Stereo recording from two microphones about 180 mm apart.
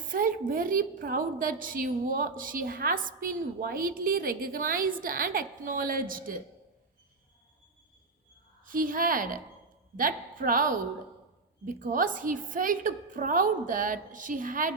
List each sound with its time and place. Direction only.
0.1 s a woman's voice: 50° right (ahead or behind)
8.6 s a woman's voice: 50° right (ahead or behind)